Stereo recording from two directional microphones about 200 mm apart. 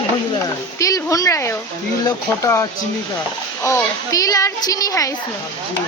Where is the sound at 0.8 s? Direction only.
15° left (ahead or behind).